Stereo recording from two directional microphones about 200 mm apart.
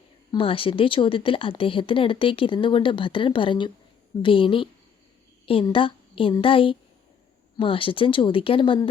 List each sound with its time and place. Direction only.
0.3 s speech: 25° left (ahead or behind)